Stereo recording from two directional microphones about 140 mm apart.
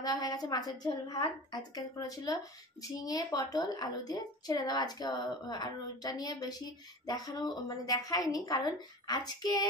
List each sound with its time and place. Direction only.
0.0 s a woman's voice: 25° left (ahead or behind)